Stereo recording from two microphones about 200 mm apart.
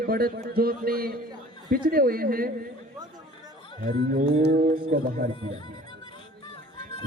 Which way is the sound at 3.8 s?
50° right (ahead or behind).